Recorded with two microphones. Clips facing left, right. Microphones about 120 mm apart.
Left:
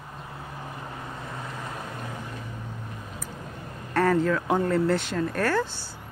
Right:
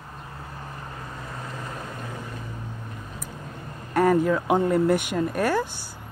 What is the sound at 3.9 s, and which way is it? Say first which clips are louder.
Speech: right 2 dB; 15° right (ahead or behind).